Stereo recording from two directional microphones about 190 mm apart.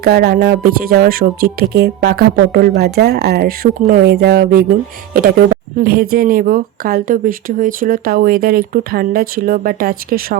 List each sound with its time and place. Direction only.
0.0 s speech: 55° right (ahead or behind)
5.8 s speech: 50° right (ahead or behind)